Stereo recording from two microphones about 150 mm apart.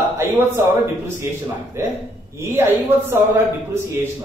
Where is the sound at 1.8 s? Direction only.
15° right (ahead or behind).